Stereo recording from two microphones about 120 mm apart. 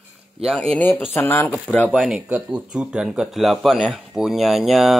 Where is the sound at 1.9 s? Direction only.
5° right (ahead or behind).